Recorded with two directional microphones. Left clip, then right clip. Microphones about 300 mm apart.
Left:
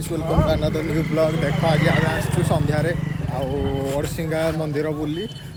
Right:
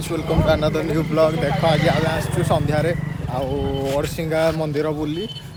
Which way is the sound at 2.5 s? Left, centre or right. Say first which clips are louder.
Right 4 dB; centre.